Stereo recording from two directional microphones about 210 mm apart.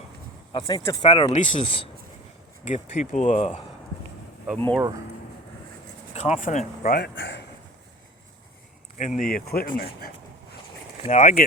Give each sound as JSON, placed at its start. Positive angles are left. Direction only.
{"t": 0.5, "sound": "speech", "side_deg": 15}
{"t": 4.5, "sound": "speech", "side_deg": -5}
{"t": 6.1, "sound": "speech", "side_deg": 30}
{"t": 9.0, "sound": "speech", "side_deg": 35}
{"t": 11.1, "sound": "speech", "side_deg": 35}